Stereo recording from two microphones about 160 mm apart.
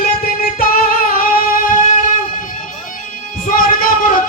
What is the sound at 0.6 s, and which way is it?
Music, 65° left (ahead or behind).